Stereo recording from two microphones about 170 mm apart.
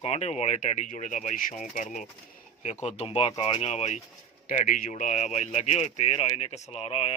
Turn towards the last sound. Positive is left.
turn(degrees=35)  # may be behind; listen again after turning